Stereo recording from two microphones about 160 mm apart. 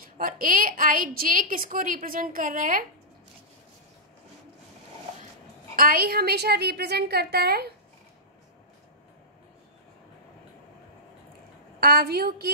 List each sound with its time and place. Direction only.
0.0 s a woman's voice: 60° right (ahead or behind)
5.8 s a woman's voice: 65° right (ahead or behind)
11.8 s a woman's voice: 75° right (ahead or behind)